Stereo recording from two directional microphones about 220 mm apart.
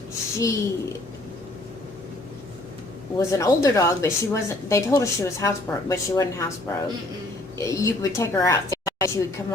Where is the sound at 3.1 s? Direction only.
15° left (ahead or behind).